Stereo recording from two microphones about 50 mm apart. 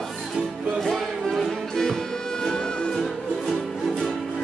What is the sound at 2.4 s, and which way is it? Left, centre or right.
Music, centre.